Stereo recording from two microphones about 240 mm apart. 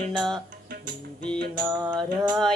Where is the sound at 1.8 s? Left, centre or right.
Centre.